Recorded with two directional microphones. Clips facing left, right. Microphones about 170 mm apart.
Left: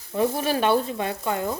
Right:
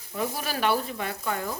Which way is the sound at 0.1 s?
25° left (ahead or behind).